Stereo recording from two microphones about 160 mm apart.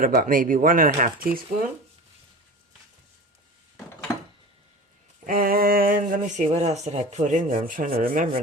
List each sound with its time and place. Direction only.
0.0 s speech: 60° right (ahead or behind)
5.2 s speech: 60° right (ahead or behind); by 6.7 s 45° right (ahead or behind)
6.8 s rub: 45° right (ahead or behind)
7.7 s speech: 55° right (ahead or behind)